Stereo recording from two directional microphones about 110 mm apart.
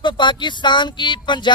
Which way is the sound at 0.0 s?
45° left (ahead or behind).